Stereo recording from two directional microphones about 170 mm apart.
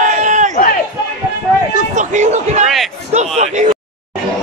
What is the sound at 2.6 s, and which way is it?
Speech, centre (ahead or behind).